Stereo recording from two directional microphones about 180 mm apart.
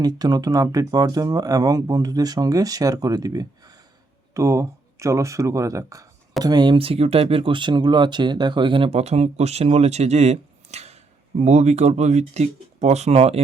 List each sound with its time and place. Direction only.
0.0 s speech: 20° right (ahead or behind)